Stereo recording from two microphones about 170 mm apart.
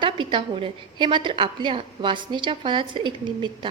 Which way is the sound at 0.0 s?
30° right (ahead or behind).